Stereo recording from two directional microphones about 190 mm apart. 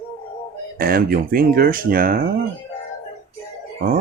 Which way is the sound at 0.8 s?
50° right (ahead or behind).